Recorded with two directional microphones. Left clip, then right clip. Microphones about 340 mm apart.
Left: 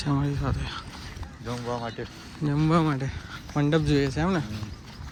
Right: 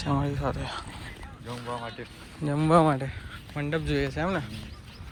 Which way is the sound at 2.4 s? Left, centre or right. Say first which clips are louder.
Right 3 dB; centre.